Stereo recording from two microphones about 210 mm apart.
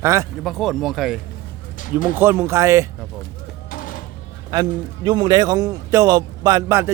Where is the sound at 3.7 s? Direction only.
40° left (ahead or behind).